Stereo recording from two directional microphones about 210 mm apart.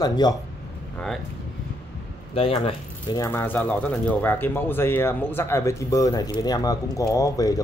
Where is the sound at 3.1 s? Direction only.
10° left (ahead or behind).